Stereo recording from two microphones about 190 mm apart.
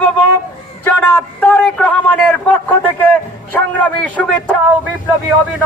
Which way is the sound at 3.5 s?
10° left (ahead or behind).